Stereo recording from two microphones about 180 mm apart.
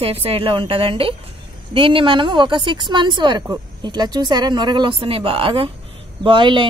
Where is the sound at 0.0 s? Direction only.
30° right (ahead or behind).